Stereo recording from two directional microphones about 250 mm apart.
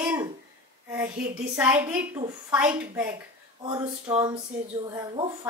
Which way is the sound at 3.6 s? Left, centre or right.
Centre.